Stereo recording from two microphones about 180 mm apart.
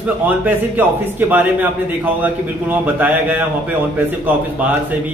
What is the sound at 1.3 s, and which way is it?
A man's voice, 10° right (ahead or behind).